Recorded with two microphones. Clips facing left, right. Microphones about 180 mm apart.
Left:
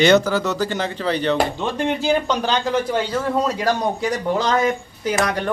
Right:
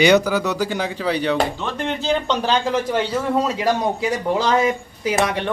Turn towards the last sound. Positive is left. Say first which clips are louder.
# even
turn(degrees=0)  # may be behind; listen again after turning